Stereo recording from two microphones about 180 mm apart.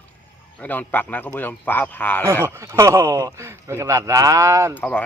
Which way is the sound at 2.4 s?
15° right (ahead or behind).